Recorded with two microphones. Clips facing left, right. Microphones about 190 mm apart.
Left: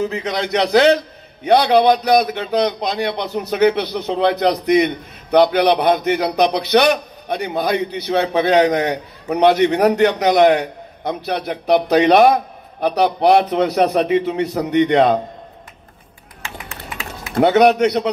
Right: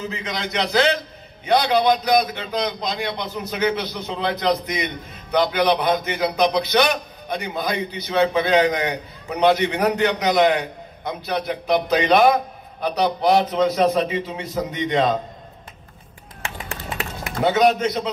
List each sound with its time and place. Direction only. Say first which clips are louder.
0.0 s a man's voice: left 7 dB; 65° left (ahead or behind)
17.4 s speech: left 5 dB; 65° left (ahead or behind)